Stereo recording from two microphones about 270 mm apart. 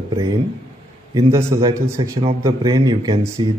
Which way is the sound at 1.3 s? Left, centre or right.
Centre.